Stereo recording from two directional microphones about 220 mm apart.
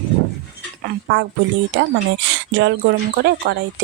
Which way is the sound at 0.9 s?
50° right (ahead or behind).